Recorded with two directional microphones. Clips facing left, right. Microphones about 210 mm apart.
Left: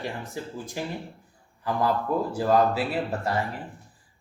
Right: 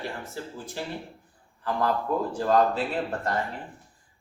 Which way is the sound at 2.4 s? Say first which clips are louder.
Left 1 dB; 5° left (ahead or behind).